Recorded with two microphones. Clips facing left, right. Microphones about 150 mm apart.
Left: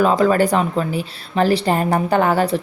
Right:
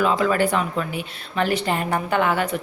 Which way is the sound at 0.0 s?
40° left (ahead or behind).